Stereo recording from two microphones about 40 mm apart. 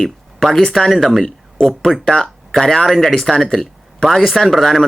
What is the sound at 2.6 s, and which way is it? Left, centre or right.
Speech, centre.